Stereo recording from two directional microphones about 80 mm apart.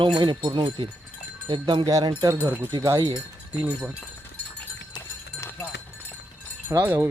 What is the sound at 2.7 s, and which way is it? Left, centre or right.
Speech, right.